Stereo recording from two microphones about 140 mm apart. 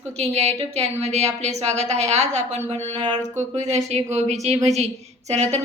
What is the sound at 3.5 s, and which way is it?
A woman's voice, 55° right (ahead or behind).